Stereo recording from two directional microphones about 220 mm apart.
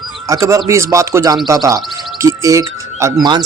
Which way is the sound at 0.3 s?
15° right (ahead or behind).